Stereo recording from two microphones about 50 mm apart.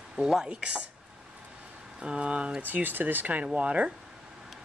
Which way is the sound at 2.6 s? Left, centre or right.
Right.